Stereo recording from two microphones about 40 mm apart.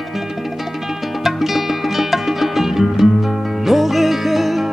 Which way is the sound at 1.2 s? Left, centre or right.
Centre.